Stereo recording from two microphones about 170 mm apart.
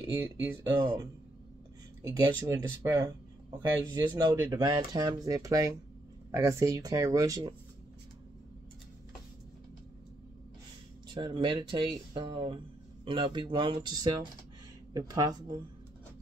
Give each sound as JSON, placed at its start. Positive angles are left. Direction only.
{"t": 0.5, "sound": "speech", "side_deg": -15}
{"t": 2.0, "sound": "speech", "side_deg": -20}
{"t": 11.1, "sound": "speech", "side_deg": -30}